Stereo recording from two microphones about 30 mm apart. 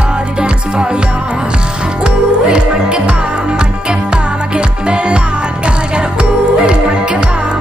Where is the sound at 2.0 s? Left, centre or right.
Right.